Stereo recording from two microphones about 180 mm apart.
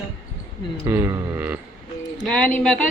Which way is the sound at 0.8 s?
15° right (ahead or behind).